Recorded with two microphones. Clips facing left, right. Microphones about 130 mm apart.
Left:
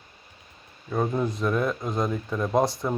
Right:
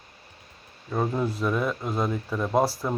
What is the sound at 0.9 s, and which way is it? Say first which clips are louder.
Speech: left 1 dB; 5° right (ahead or behind).